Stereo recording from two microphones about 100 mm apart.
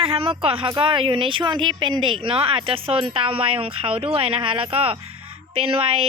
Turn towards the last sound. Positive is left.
turn(degrees=-65)  # may be behind; listen again after turning